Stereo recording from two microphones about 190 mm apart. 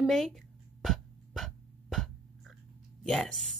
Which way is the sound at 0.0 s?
Centre (ahead or behind).